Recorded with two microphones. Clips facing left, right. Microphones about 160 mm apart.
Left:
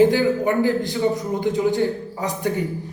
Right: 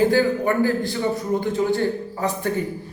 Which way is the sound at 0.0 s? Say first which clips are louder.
Left 2 dB; 20° left (ahead or behind).